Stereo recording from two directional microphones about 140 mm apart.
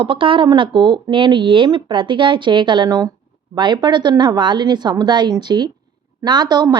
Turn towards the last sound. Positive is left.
turn(degrees=-30)  # may be behind; listen again after turning